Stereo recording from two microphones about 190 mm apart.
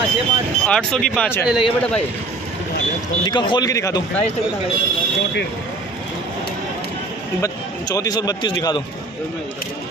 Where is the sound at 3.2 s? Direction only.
25° left (ahead or behind).